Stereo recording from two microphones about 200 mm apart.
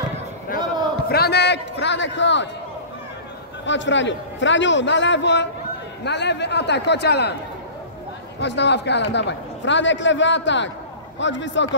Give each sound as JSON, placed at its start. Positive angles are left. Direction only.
{"t": 1.0, "sound": "a man's voice", "side_deg": 50}
{"t": 3.6, "sound": "a man's voice", "side_deg": 65}
{"t": 8.4, "sound": "a man's voice", "side_deg": 60}